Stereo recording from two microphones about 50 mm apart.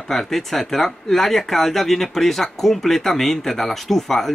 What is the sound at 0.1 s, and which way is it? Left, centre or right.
Speech, centre.